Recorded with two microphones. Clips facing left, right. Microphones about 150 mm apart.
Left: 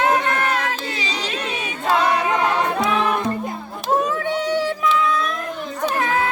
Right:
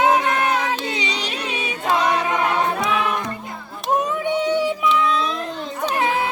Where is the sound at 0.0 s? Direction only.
15° right (ahead or behind).